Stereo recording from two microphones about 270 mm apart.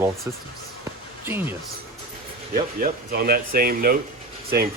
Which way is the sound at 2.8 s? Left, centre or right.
Right.